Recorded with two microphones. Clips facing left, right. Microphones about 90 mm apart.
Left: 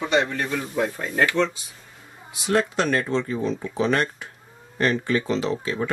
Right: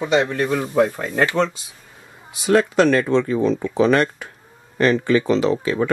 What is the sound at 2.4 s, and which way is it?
Speech, 90° right.